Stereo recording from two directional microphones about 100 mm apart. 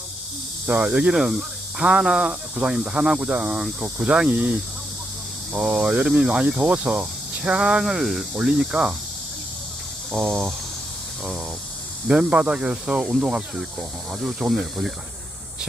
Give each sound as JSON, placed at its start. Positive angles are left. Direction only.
{"t": 0.7, "sound": "speech", "side_deg": -10}
{"t": 5.5, "sound": "speech", "side_deg": -10}
{"t": 10.1, "sound": "speech", "side_deg": -20}
{"t": 12.0, "sound": "speech", "side_deg": -10}